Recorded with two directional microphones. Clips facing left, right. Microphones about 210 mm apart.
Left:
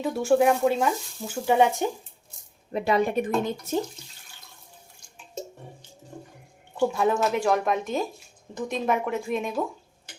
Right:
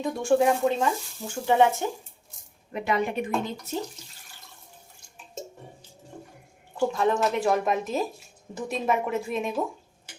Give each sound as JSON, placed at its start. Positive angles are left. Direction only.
{"t": 0.0, "sound": "speech", "side_deg": 5}
{"t": 2.7, "sound": "speech", "side_deg": 35}
{"t": 6.7, "sound": "speech", "side_deg": 5}